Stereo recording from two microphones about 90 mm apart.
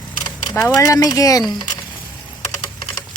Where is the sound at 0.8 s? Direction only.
40° left (ahead or behind).